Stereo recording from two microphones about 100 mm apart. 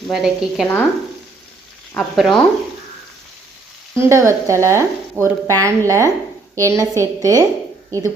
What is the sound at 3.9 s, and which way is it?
A woman's voice, 30° right (ahead or behind).